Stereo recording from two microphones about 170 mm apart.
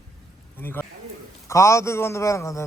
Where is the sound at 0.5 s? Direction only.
10° left (ahead or behind).